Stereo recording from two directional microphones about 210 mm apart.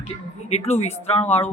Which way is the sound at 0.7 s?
30° left (ahead or behind).